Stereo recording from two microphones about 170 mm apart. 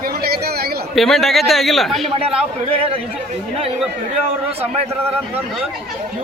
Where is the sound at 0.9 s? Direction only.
Centre (ahead or behind).